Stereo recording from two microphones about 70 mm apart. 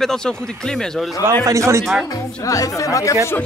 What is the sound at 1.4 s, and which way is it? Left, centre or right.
Speech, right.